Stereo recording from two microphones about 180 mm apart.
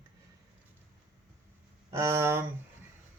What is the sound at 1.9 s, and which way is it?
Speech, 15° right (ahead or behind).